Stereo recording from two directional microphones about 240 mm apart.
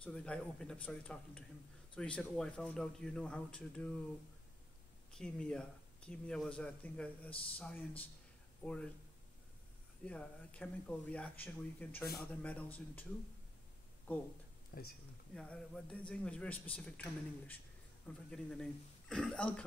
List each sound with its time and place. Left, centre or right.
0.0 s speech: centre
5.1 s speech: centre
10.0 s speech: centre
14.1 s speech: centre
14.7 s speech: left
15.3 s speech: centre